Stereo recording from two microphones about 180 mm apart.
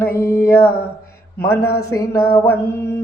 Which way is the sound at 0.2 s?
15° left (ahead or behind).